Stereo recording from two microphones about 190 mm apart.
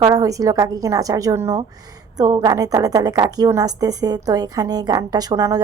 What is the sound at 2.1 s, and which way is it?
A woman's voice, 20° right (ahead or behind).